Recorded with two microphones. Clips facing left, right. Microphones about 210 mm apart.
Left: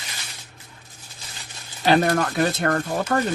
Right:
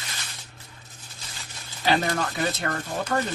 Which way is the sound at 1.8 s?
50° left (ahead or behind).